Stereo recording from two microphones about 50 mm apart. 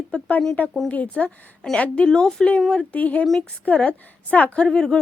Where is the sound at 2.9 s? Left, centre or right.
Left.